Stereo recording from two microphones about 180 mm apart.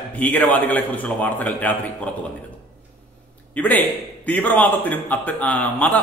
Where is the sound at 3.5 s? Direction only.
10° left (ahead or behind).